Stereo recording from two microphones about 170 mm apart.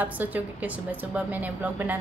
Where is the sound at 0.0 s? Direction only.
10° right (ahead or behind).